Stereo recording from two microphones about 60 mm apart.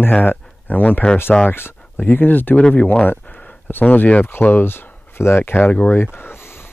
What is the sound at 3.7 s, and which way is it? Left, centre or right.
Speech, left.